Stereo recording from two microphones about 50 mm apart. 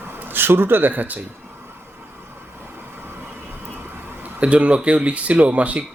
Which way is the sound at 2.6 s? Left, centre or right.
Right.